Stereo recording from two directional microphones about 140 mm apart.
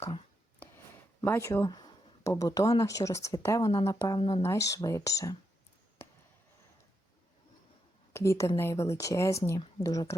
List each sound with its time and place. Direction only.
0.6 s a sound: 15° left (ahead or behind)
1.2 s speech: 15° left (ahead or behind)
1.6 s a sound: 30° left (ahead or behind)
2.3 s speech: 25° left (ahead or behind)
4.2 s speech: 40° left (ahead or behind)
4.4 s speech: 20° left (ahead or behind)
8.1 s speech: 20° left (ahead or behind)